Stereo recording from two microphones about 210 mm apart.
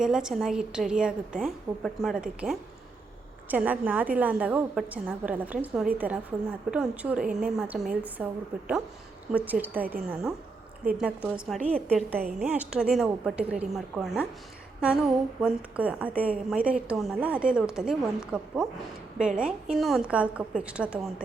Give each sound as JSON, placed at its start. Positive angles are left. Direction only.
{"t": 0.0, "sound": "a woman's voice", "side_deg": -5}
{"t": 9.3, "sound": "a woman's voice", "side_deg": -10}
{"t": 12.4, "sound": "a woman's voice", "side_deg": -5}